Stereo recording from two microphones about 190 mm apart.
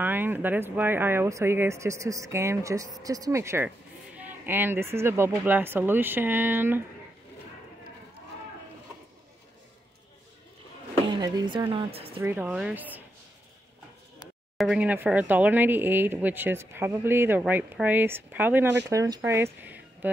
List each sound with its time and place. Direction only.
0.0 s speech: 10° right (ahead or behind)
11.1 s speech: 20° right (ahead or behind)
12.2 s speech: 10° right (ahead or behind)
14.6 s speech: 5° right (ahead or behind)